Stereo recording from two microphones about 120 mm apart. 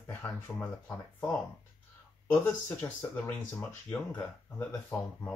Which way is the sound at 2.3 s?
20° left (ahead or behind).